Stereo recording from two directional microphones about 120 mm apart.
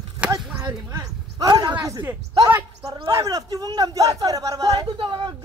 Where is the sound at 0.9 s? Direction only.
30° right (ahead or behind).